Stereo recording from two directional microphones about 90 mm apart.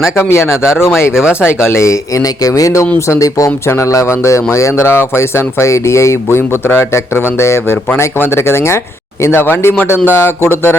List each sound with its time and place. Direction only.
0.2 s speech: 30° left (ahead or behind)